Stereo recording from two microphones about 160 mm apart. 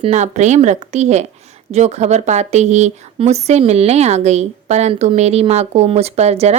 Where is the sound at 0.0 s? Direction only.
45° right (ahead or behind).